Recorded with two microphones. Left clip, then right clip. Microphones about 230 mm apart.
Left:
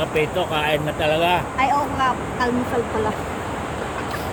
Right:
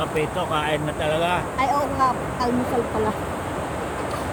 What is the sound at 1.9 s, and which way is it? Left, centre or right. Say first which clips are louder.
Speech: left 1 dB; centre.